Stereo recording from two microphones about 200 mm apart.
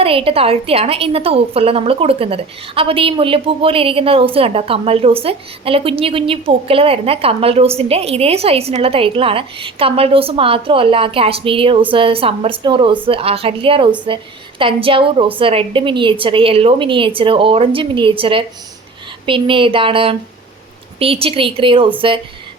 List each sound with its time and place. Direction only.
0.0 s a woman's voice: 30° right (ahead or behind)